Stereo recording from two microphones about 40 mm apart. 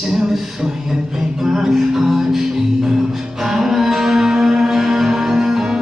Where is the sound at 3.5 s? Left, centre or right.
Centre.